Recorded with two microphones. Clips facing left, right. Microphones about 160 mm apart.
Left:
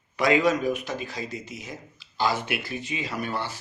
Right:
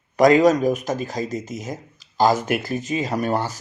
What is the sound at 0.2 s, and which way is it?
Speech, 40° right (ahead or behind).